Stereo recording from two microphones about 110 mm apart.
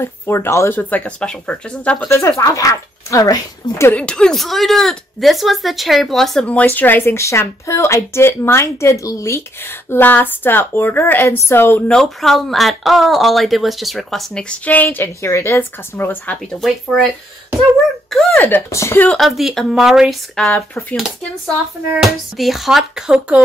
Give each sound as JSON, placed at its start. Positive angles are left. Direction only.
{"t": 0.0, "sound": "speech", "side_deg": 25}
{"t": 2.0, "sound": "speech", "side_deg": 25}
{"t": 3.9, "sound": "speech", "side_deg": 10}
{"t": 11.9, "sound": "speech", "side_deg": 5}
{"t": 16.5, "sound": "speech", "side_deg": 0}
{"t": 18.1, "sound": "a sound", "side_deg": 5}
{"t": 18.4, "sound": "speech", "side_deg": 20}
{"t": 19.0, "sound": "speech", "side_deg": 0}
{"t": 20.4, "sound": "speech", "side_deg": 20}
{"t": 22.0, "sound": "speech", "side_deg": 0}